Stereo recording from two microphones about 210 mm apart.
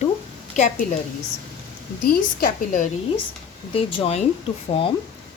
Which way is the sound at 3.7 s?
25° left (ahead or behind).